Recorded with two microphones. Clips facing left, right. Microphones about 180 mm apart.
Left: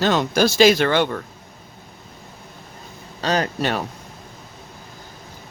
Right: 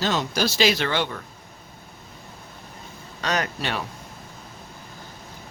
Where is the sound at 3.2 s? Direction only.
35° left (ahead or behind).